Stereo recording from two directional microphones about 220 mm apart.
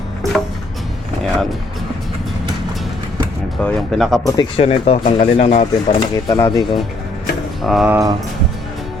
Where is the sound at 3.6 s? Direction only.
Centre (ahead or behind).